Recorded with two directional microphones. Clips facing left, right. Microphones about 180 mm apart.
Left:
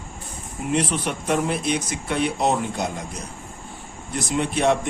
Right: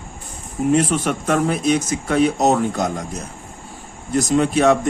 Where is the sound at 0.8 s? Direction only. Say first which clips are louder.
Right 5 dB; 45° right (ahead or behind).